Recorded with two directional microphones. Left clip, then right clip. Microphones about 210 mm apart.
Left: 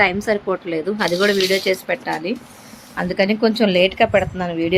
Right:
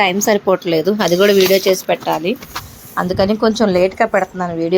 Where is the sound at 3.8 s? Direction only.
10° left (ahead or behind).